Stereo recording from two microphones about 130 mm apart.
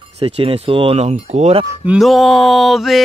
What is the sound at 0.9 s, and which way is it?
Speech, 55° right (ahead or behind).